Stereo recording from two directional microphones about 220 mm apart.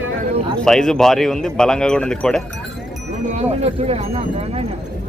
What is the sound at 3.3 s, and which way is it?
Speech, 30° right (ahead or behind).